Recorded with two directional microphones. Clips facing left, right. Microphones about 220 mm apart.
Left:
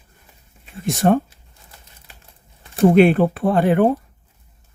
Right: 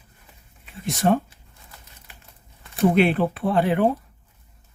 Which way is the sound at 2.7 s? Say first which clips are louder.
Left 6 dB; 45° left (ahead or behind).